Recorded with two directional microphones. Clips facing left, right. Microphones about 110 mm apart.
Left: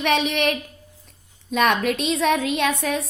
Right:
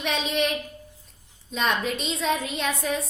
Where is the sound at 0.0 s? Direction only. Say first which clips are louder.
Left 5 dB; 65° left (ahead or behind).